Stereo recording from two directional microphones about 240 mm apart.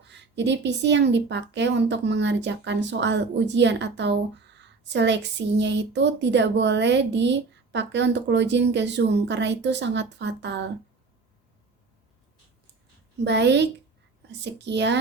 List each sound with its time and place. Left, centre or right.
0.0 s a woman's voice: right
13.2 s a woman's voice: right